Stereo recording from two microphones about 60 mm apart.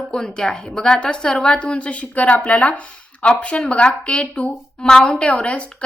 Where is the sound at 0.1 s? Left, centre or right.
Centre.